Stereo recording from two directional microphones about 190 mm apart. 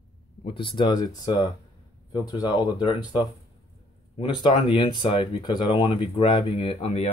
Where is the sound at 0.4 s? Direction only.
25° left (ahead or behind).